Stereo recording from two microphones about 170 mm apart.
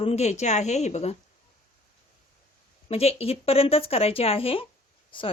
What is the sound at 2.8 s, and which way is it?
A woman's voice, 35° left (ahead or behind).